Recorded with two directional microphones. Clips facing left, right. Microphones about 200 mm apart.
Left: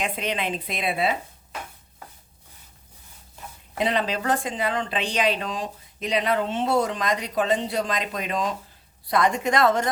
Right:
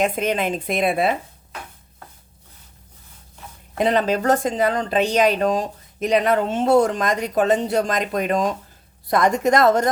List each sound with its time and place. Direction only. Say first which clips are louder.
0.0 s speech: right 7 dB; 45° right (ahead or behind)
3.8 s speech: right 6 dB; 45° right (ahead or behind)